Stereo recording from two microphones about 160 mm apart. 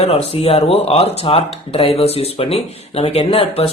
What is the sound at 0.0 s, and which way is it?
Speech, 40° left (ahead or behind).